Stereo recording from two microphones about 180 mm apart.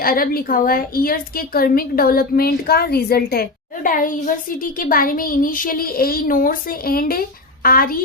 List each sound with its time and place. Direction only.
0.0 s a woman's voice: 55° left (ahead or behind)